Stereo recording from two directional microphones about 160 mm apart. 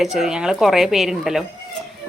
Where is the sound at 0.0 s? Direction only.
Centre (ahead or behind).